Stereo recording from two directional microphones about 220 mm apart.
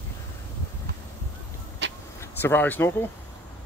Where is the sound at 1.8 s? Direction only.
50° right (ahead or behind).